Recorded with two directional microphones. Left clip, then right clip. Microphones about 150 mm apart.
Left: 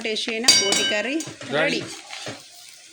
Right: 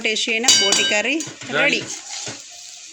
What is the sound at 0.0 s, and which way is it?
Speech, 15° right (ahead or behind).